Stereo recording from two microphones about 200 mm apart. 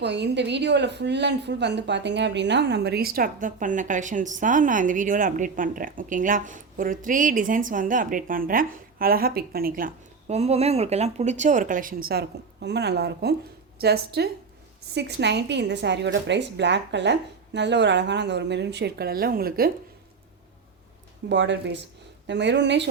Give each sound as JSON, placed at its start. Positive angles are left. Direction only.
{"t": 0.0, "sound": "a woman's voice", "side_deg": -60}
{"t": 21.2, "sound": "a woman's voice", "side_deg": -60}